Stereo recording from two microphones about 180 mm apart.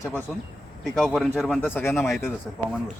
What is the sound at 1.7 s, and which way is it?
Speech, 15° left (ahead or behind).